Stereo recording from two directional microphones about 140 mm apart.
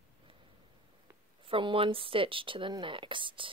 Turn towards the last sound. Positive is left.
turn(degrees=-35)  # may be behind; listen again after turning